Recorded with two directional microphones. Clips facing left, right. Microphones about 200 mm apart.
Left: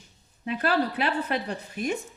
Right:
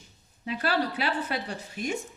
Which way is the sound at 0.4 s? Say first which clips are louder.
Left 3 dB; 55° left (ahead or behind).